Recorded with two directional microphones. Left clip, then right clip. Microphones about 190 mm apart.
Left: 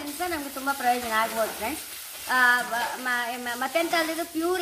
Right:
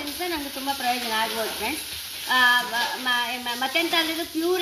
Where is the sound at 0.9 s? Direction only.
15° left (ahead or behind).